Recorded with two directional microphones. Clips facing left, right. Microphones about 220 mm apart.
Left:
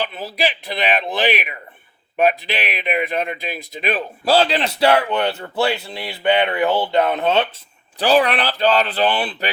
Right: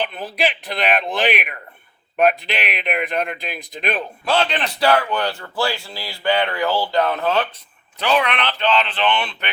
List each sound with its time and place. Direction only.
0.0 s speech: 5° left (ahead or behind)
4.3 s speech: 35° left (ahead or behind)
7.9 s speech: 35° left (ahead or behind)